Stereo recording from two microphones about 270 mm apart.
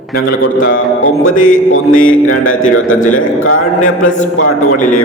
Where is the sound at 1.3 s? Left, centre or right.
Left.